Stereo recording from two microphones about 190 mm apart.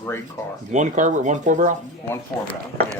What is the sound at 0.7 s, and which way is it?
Speech, 40° right (ahead or behind).